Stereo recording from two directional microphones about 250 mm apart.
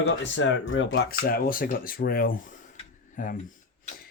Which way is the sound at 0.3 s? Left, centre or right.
Left.